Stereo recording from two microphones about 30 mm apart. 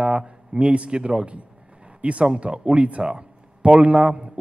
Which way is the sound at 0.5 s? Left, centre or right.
Right.